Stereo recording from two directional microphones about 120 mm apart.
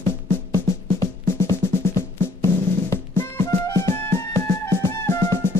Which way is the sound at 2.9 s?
20° left (ahead or behind).